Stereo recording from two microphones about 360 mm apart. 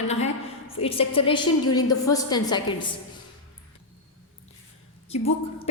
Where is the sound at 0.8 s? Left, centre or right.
Centre.